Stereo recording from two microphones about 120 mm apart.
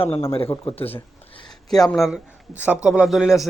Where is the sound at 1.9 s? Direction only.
Centre (ahead or behind).